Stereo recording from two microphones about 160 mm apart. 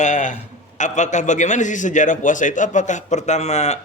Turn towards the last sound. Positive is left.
turn(degrees=45)  # may be behind; listen again after turning